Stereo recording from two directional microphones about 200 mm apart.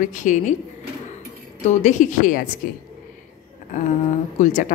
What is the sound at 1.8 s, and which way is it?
Speech, 40° left (ahead or behind).